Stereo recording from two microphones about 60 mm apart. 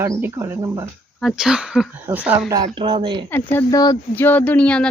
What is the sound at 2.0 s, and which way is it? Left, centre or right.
Speech, right.